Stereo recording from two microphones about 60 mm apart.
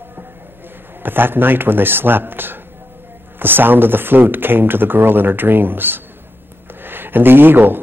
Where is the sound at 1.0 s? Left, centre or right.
Right.